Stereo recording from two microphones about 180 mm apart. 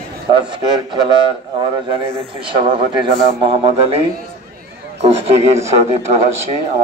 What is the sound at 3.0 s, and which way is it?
A man's voice, 30° right (ahead or behind).